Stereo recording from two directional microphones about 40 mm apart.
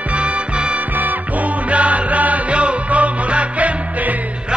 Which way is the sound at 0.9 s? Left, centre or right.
Right.